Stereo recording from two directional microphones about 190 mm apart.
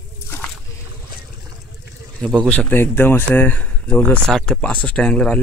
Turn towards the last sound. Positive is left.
turn(degrees=5)  # may be behind; listen again after turning